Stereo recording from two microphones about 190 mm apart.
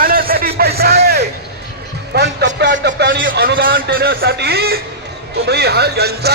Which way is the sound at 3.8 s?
50° right (ahead or behind).